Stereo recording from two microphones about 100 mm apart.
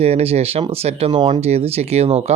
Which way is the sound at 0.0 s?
90° right.